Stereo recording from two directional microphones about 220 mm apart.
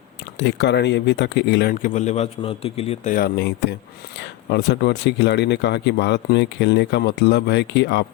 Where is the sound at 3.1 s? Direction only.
45° left (ahead or behind).